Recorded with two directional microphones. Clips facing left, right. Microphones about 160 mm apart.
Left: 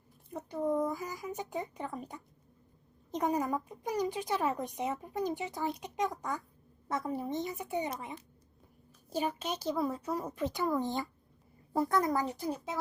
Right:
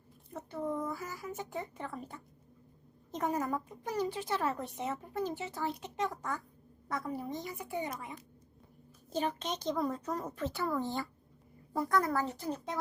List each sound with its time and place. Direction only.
0.3 s a woman's voice: 15° left (ahead or behind)
9.0 s speech: 10° left (ahead or behind)